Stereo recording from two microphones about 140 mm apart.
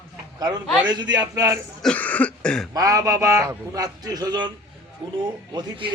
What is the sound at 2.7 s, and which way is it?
A man's voice, 25° right (ahead or behind).